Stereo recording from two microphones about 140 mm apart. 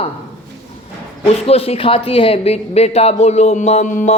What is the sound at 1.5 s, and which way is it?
Speech, 45° left (ahead or behind).